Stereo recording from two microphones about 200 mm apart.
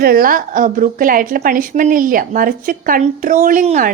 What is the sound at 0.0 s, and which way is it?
A woman's voice, 45° right (ahead or behind).